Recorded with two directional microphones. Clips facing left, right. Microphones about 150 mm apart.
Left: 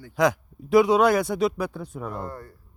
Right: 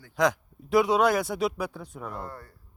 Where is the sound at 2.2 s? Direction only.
20° left (ahead or behind).